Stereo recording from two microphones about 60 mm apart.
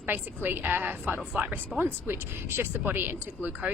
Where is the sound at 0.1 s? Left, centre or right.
Right.